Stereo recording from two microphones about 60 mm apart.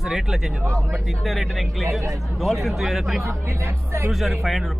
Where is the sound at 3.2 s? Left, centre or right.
Right.